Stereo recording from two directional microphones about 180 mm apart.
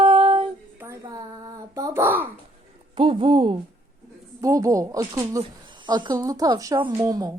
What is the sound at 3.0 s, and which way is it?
Speech, 30° right (ahead or behind).